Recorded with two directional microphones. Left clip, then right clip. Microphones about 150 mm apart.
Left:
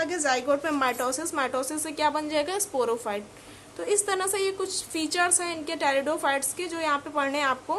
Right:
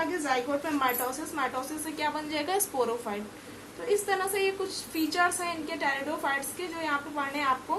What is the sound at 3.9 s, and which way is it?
A woman's voice, 45° left (ahead or behind).